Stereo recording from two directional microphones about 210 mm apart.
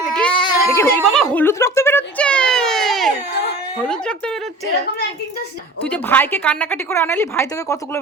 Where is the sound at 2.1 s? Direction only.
5° left (ahead or behind).